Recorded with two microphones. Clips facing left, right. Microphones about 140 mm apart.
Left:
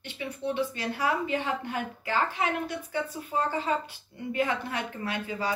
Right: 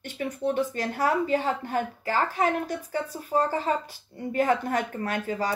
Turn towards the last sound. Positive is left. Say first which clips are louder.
# right 4 dB
turn(degrees=-45)  # may be behind; listen again after turning